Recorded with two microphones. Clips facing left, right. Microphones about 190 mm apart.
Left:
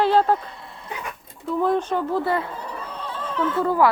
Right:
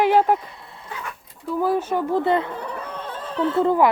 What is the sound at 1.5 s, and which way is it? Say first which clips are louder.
Speech: even; 5° right (ahead or behind).